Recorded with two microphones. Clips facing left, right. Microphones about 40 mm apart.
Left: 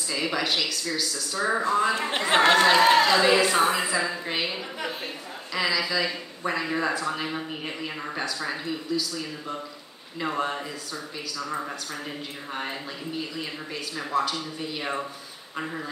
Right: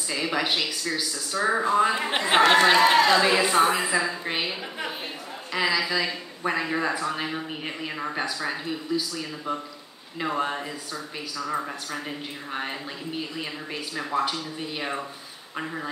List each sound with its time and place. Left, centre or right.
0.1 s speech: centre
2.8 s speech: centre
3.3 s speech: centre
8.9 s speech: right
10.2 s speech: centre
13.4 s speech: centre
15.5 s speech: centre